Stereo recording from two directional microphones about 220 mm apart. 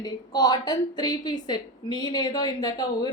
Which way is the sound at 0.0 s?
20° left (ahead or behind).